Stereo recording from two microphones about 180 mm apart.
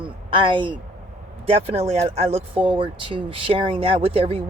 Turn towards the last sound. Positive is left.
turn(degrees=-30)  # may be behind; listen again after turning